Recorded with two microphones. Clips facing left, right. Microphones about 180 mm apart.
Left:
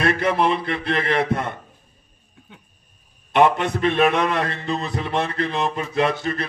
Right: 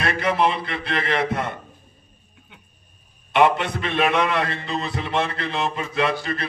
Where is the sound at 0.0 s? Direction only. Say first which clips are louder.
Left 2 dB; 45° left (ahead or behind).